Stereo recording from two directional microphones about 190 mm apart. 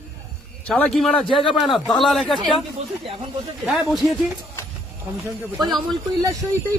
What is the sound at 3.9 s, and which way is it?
Speech, centre (ahead or behind).